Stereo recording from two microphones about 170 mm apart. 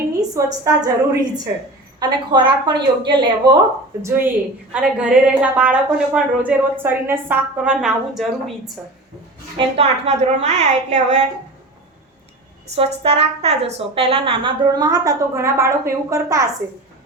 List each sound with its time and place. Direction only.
0.2 s a woman's voice: 20° right (ahead or behind)
4.0 s a woman's voice: 10° right (ahead or behind)
9.6 s a woman's voice: 40° right (ahead or behind)
12.7 s a woman's voice: 35° right (ahead or behind); by 16.5 s 20° right (ahead or behind)